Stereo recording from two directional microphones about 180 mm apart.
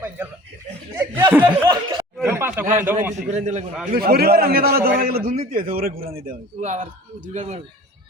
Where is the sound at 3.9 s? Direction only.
55° right (ahead or behind); by 7.6 s 40° right (ahead or behind).